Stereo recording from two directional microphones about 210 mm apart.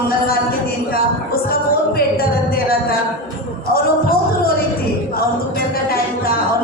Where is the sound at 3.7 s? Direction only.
45° left (ahead or behind).